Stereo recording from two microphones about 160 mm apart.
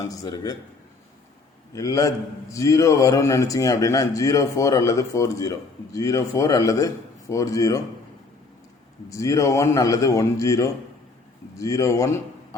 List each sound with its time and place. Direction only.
0.0 s a man's voice: 25° left (ahead or behind)
1.7 s a man's voice: 20° left (ahead or behind)
9.0 s a man's voice: 20° left (ahead or behind)